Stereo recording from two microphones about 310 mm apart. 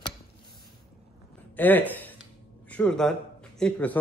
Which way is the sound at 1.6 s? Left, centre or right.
Centre.